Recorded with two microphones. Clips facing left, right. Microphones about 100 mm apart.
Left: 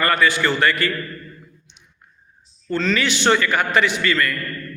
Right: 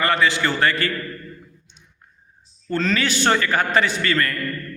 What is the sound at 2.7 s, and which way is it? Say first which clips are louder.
A man's voice: left 1 dB; 40° right (ahead or behind).